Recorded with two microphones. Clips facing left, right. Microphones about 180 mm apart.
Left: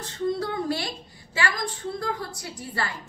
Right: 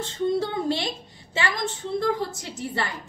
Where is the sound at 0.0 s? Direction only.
25° right (ahead or behind).